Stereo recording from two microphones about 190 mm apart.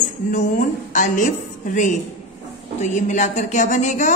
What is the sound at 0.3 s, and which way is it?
A woman's voice, 40° left (ahead or behind).